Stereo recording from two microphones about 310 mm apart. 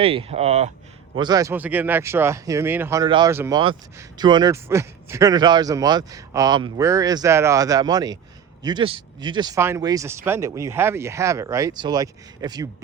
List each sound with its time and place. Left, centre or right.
0.0 s speech: centre